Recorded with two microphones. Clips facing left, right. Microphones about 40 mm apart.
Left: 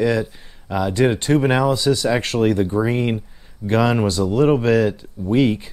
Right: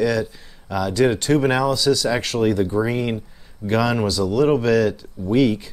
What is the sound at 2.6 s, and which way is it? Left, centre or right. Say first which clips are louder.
Speech: left 1 dB; centre.